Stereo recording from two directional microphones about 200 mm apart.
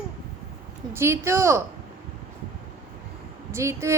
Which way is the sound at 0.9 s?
15° right (ahead or behind).